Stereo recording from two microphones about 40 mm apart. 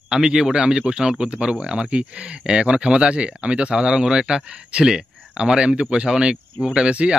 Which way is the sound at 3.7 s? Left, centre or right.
Centre.